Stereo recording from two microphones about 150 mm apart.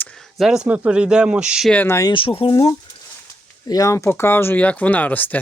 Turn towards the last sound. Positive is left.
turn(degrees=10)  # may be behind; listen again after turning